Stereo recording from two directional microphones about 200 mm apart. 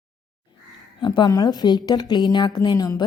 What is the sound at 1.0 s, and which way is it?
A woman's voice, 20° left (ahead or behind).